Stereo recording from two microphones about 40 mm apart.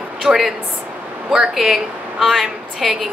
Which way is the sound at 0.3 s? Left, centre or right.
Right.